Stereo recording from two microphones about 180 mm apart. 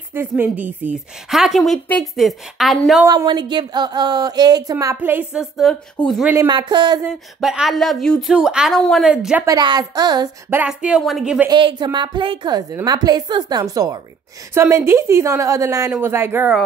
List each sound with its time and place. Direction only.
0.1 s a woman's voice: 10° right (ahead or behind)
3.1 s a woman's voice: 25° right (ahead or behind); by 6.3 s centre (ahead or behind)
6.3 s a woman's voice: 25° right (ahead or behind)
7.3 s a woman's voice: centre (ahead or behind)
9.5 s a woman's voice: 25° right (ahead or behind)
10.5 s a woman's voice: 5° right (ahead or behind)
11.4 s a woman's voice: 25° right (ahead or behind)